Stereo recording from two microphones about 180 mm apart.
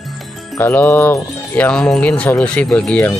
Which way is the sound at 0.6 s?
10° left (ahead or behind).